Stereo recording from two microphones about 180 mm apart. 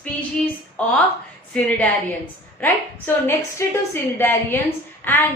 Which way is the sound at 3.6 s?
15° left (ahead or behind).